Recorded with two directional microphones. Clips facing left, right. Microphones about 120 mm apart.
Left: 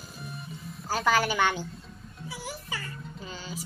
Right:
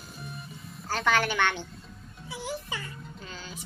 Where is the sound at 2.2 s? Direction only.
20° right (ahead or behind).